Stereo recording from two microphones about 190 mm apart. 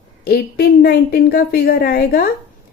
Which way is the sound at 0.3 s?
55° left (ahead or behind).